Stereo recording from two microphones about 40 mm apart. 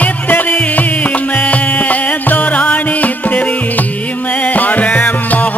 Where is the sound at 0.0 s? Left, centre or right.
Left.